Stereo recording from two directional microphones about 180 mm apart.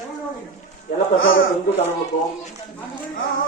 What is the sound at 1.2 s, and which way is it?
Speech, 90° left.